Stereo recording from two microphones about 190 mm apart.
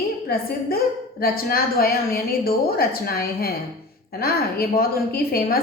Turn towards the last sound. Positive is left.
turn(degrees=50)  # may be behind; listen again after turning